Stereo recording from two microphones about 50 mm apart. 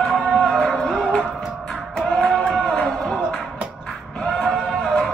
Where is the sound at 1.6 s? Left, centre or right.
Centre.